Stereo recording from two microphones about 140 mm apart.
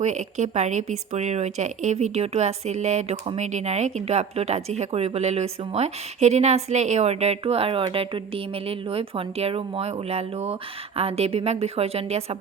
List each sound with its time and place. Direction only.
0.0 s a woman's voice: 55° right (ahead or behind)